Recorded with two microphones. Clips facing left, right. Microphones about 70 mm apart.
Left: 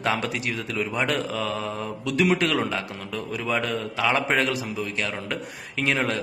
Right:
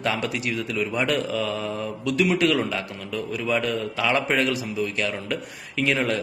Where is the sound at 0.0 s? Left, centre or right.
Left.